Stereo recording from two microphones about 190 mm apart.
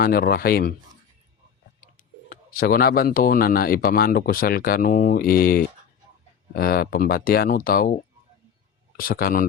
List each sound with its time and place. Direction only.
0.0 s speech: 50° left (ahead or behind)
2.5 s speech: 50° left (ahead or behind)
9.0 s speech: 50° left (ahead or behind)